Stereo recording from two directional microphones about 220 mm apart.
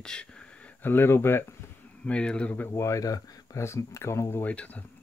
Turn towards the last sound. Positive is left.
turn(degrees=5)  # may be behind; listen again after turning